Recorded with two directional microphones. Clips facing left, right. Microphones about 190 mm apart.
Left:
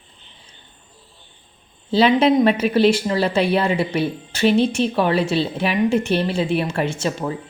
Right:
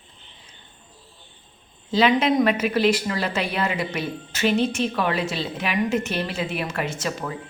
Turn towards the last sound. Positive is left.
turn(degrees=30)  # may be behind; listen again after turning